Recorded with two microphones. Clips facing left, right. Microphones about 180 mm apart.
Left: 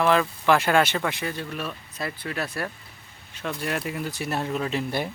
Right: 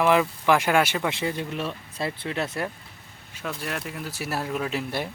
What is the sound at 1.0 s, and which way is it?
Speech, 20° right (ahead or behind).